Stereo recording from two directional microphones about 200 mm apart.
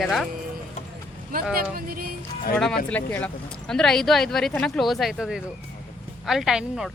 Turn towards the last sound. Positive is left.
turn(degrees=0)  # may be behind; listen again after turning